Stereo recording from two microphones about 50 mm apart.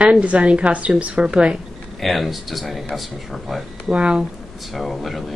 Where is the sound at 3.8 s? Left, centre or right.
Right.